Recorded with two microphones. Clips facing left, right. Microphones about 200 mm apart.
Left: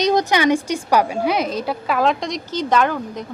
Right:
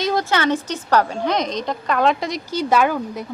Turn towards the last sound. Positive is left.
turn(degrees=-10)  # may be behind; listen again after turning